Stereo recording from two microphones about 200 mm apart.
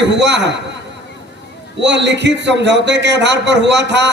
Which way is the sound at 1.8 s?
60° right (ahead or behind).